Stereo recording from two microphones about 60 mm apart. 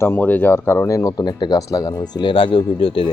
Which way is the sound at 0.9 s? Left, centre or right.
Left.